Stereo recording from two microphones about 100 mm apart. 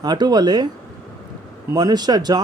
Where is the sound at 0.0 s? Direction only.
40° right (ahead or behind).